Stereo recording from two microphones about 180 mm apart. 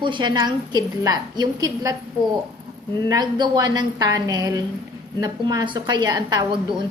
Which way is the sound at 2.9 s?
25° right (ahead or behind).